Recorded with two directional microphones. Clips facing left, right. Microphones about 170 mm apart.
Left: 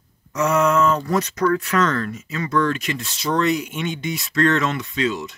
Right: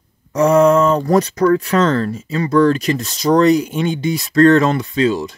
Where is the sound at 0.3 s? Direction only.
35° right (ahead or behind).